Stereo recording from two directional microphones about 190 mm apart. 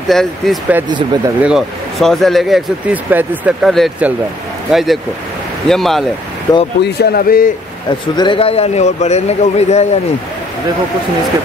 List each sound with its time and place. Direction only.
0.1 s speech: centre (ahead or behind)
0.8 s speech: 20° right (ahead or behind)
1.4 s speech: centre (ahead or behind)
6.5 s speech: 20° left (ahead or behind)
6.8 s speech: 55° left (ahead or behind)
8.2 s speech: 30° left (ahead or behind)